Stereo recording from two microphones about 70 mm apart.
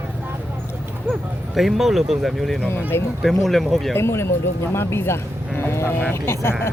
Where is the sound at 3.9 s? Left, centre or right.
Left.